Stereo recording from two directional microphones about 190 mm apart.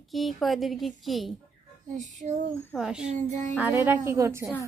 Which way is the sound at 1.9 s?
40° right (ahead or behind).